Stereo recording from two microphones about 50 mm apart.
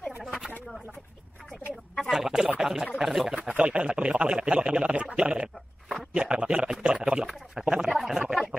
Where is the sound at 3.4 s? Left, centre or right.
Right.